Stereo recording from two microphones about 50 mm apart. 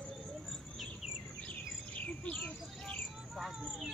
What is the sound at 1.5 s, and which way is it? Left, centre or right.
Chirp, left.